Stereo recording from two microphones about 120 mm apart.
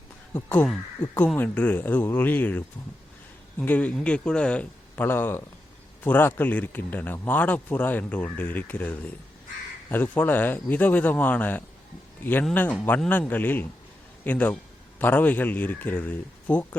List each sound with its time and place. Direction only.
0.3 s speech: 15° left (ahead or behind)